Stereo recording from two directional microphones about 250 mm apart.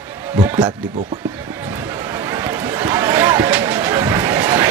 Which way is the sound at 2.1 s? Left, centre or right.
Centre.